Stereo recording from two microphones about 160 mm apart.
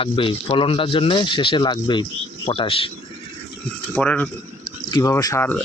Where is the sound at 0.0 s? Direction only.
35° left (ahead or behind).